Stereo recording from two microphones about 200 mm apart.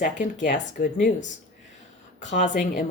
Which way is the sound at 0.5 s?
45° left (ahead or behind).